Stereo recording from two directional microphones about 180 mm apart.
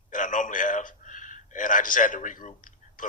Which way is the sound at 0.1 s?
45° left (ahead or behind).